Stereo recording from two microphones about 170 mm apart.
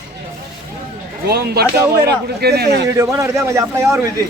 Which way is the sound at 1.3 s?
65° right (ahead or behind).